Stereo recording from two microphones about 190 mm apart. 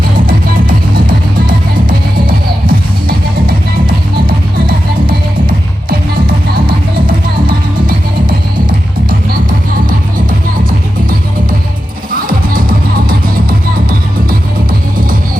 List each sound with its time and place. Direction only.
1.9 s music: 50° right (ahead or behind)
7.4 s music: 50° right (ahead or behind)
12.1 s music: 50° right (ahead or behind)